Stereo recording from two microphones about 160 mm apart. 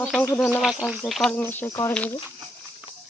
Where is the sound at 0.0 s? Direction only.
5° left (ahead or behind).